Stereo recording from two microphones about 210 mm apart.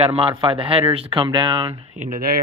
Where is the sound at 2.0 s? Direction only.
40° right (ahead or behind).